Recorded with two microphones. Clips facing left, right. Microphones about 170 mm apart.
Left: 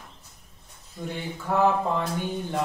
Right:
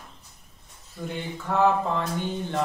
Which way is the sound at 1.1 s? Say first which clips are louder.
Left 1 dB; 10° left (ahead or behind).